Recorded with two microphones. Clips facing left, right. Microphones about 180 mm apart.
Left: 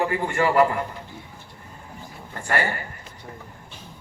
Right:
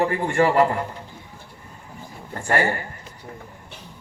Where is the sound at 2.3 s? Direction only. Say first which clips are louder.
Right 3 dB; 25° right (ahead or behind).